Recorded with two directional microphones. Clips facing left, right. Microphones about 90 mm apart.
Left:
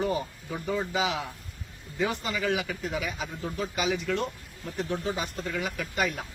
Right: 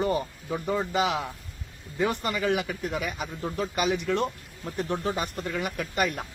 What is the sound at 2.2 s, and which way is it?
Speech, 55° right (ahead or behind).